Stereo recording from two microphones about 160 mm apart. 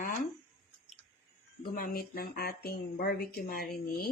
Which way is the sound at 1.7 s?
70° left (ahead or behind).